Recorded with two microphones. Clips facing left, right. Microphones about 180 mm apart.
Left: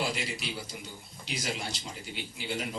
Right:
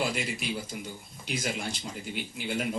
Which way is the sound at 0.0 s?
50° right (ahead or behind).